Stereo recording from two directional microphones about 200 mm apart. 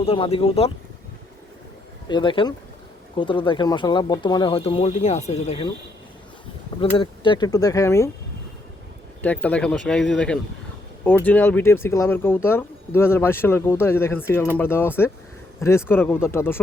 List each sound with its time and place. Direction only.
0.0 s speech: 30° left (ahead or behind)
2.0 s speech: 25° left (ahead or behind)
6.9 s speech: 25° left (ahead or behind)
9.2 s speech: 5° left (ahead or behind)